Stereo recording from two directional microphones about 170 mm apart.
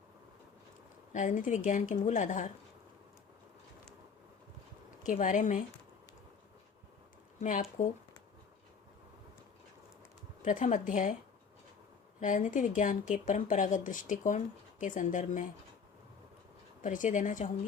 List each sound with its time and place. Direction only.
1.1 s speech: 50° left (ahead or behind)
5.1 s speech: 45° left (ahead or behind)
7.4 s speech: 45° left (ahead or behind)
10.4 s speech: 45° left (ahead or behind)
12.2 s speech: 50° left (ahead or behind)
16.8 s speech: 50° left (ahead or behind)